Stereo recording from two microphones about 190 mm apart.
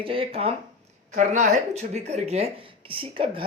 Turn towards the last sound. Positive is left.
turn(degrees=-30)  # may be behind; listen again after turning